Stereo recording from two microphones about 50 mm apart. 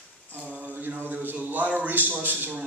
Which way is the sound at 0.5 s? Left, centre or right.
Right.